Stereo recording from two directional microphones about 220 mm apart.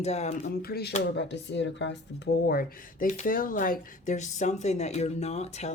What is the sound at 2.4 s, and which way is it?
Speech, 40° left (ahead or behind).